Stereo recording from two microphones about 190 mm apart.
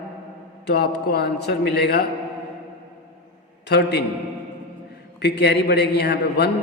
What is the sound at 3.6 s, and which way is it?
Speech, 60° left (ahead or behind).